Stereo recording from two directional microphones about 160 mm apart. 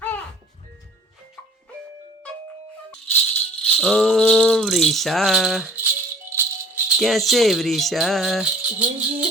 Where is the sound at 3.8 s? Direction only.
Centre (ahead or behind).